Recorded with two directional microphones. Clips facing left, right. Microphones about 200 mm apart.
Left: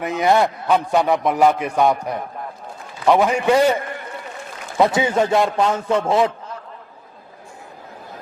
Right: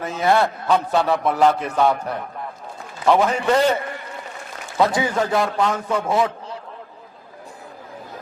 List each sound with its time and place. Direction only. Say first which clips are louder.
0.0 s a man's voice: left 2 dB; 15° left (ahead or behind)
3.2 s a man's voice: left 2 dB; 10° left (ahead or behind)
4.8 s a man's voice: left 3 dB; 25° left (ahead or behind)